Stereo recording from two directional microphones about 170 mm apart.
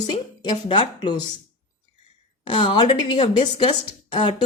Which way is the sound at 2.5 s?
30° left (ahead or behind).